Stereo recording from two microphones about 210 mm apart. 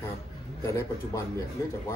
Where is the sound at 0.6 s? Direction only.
15° left (ahead or behind).